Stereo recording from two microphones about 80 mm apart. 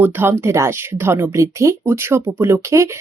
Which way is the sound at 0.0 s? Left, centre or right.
Right.